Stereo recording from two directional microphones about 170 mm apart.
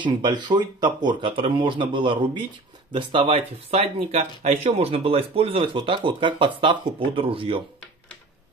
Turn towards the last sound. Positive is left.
turn(degrees=-30)  # may be behind; listen again after turning